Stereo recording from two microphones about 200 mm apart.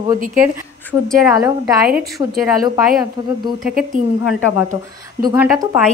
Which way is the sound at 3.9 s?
40° right (ahead or behind).